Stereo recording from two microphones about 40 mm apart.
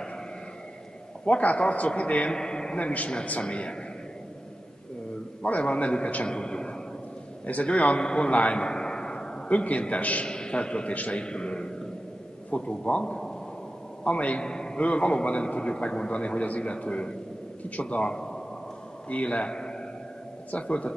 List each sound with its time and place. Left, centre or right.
1.2 s a man's voice: left
2.3 s a man's voice: centre
2.8 s a man's voice: left
5.4 s a man's voice: left
6.2 s a sound: left
7.4 s a man's voice: left; by 9.4 s centre
9.5 s a man's voice: left
10.2 s a man's voice: left
14.8 s a man's voice: left
19.0 s a man's voice: left
19.5 s a sound: centre
20.5 s a man's voice: left